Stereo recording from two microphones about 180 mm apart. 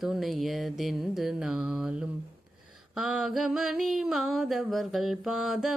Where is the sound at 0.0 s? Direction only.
Centre (ahead or behind).